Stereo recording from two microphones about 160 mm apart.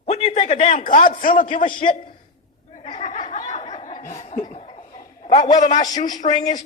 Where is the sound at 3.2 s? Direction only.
45° left (ahead or behind).